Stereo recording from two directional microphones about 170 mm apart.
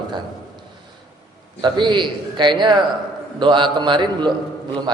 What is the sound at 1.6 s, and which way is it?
A man's voice, 25° right (ahead or behind).